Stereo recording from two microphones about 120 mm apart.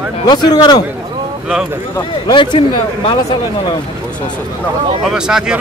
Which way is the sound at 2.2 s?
40° left (ahead or behind).